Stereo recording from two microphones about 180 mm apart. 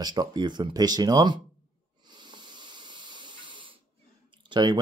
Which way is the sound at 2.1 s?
25° right (ahead or behind).